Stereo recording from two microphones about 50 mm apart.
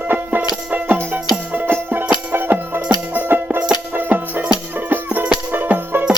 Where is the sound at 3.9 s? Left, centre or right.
Right.